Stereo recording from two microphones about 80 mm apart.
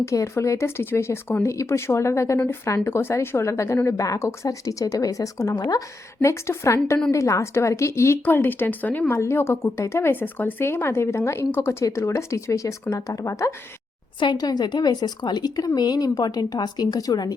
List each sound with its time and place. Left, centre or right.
0.0 s a woman's voice: left
6.2 s speech: left
9.1 s speech: left
14.3 s speech: left